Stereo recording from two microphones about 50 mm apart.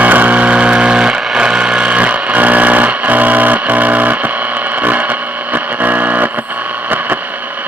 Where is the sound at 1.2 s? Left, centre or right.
Centre.